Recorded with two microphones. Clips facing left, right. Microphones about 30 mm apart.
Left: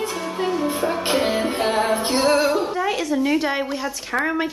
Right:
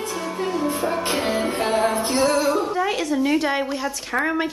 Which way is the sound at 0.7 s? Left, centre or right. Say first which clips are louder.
Left 2 dB; centre.